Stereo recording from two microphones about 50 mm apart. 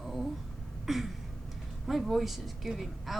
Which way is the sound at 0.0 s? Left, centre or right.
Centre.